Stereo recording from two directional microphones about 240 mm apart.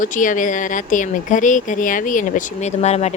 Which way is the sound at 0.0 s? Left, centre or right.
Left.